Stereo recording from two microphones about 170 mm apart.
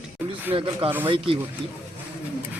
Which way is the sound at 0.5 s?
30° right (ahead or behind).